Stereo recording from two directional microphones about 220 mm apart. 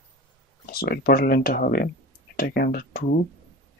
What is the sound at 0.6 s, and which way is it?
Speech, 45° left (ahead or behind).